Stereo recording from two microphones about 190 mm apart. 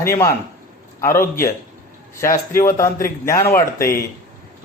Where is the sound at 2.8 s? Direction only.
15° left (ahead or behind).